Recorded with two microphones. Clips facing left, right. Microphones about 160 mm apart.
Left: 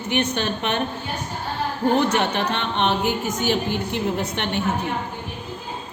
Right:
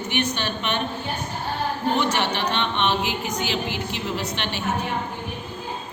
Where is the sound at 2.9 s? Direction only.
50° left (ahead or behind).